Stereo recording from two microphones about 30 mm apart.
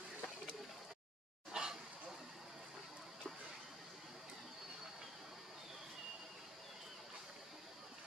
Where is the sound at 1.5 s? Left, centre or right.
Right.